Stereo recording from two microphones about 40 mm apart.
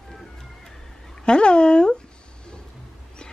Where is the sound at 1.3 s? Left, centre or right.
Left.